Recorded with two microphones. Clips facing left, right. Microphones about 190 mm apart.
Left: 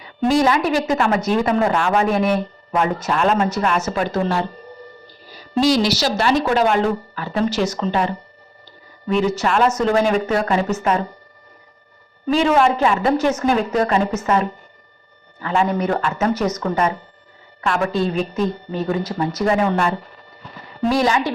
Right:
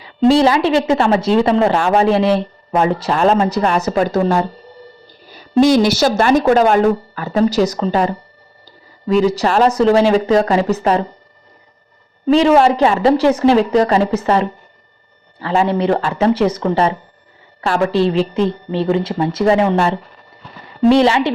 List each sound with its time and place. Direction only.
0.2 s a woman's voice: 30° right (ahead or behind)
5.5 s speech: 55° right (ahead or behind); by 8.1 s 40° right (ahead or behind)
9.1 s a woman's voice: 35° right (ahead or behind)
12.2 s a woman's voice: 30° right (ahead or behind)